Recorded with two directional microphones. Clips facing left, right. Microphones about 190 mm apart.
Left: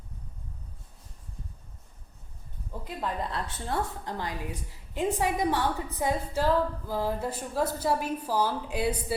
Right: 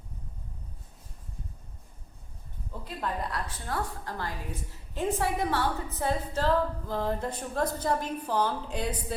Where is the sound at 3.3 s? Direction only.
25° left (ahead or behind); by 9.2 s 10° left (ahead or behind).